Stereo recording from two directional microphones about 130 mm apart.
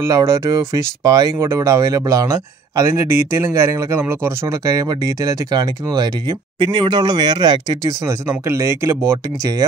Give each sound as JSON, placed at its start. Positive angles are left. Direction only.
{"t": 0.0, "sound": "speech", "side_deg": -25}